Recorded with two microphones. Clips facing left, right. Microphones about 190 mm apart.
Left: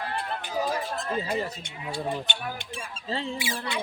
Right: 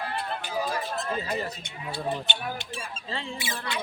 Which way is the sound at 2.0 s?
15° left (ahead or behind).